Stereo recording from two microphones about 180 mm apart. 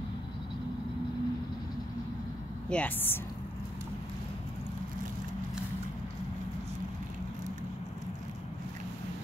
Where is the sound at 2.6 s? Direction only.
10° left (ahead or behind).